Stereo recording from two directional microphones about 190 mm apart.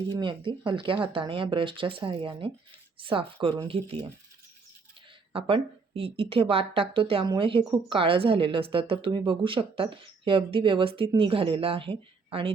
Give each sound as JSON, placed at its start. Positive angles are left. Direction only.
{"t": 0.1, "sound": "speech", "side_deg": -25}
{"t": 5.3, "sound": "speech", "side_deg": -30}